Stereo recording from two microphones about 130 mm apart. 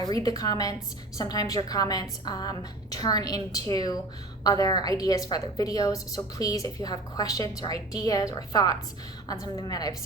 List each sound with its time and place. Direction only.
0.0 s a woman's voice: 30° left (ahead or behind)